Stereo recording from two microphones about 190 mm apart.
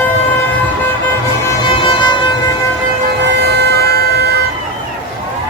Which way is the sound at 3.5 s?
60° right (ahead or behind).